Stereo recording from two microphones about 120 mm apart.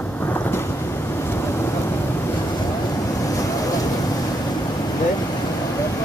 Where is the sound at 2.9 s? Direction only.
30° left (ahead or behind).